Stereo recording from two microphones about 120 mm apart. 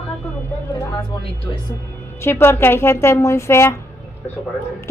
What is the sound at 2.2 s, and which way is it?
A woman's voice, 20° left (ahead or behind).